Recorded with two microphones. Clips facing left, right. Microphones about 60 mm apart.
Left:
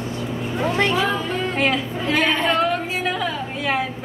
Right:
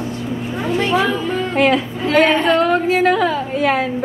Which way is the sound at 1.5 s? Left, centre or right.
Right.